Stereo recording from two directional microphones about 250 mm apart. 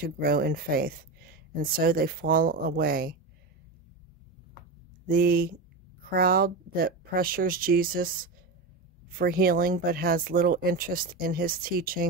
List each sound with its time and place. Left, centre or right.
0.0 s speech: right
5.0 s speech: right